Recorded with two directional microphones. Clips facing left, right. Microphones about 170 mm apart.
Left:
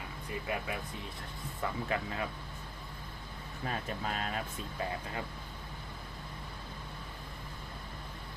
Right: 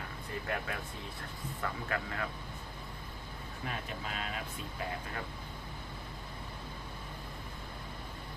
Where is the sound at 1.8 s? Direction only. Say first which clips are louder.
Left 2 dB; 20° left (ahead or behind).